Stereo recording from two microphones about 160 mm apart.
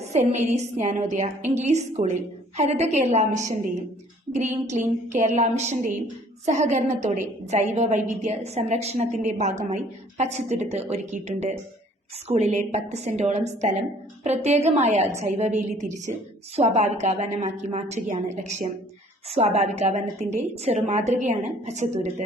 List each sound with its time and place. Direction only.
0.1 s a woman's voice: 45° right (ahead or behind)
4.4 s a woman's voice: 45° right (ahead or behind)